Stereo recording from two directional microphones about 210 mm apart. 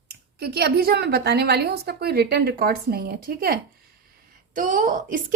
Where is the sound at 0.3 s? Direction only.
50° right (ahead or behind).